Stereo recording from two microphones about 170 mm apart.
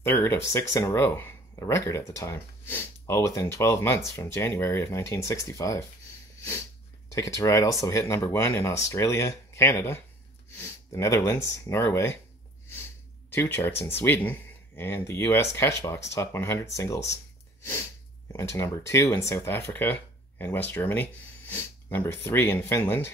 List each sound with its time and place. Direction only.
0.0 s speech: 15° left (ahead or behind)
7.1 s speech: 20° left (ahead or behind)
13.3 s speech: 15° left (ahead or behind)
17.6 s sneeze: 15° left (ahead or behind)
18.3 s speech: 15° left (ahead or behind)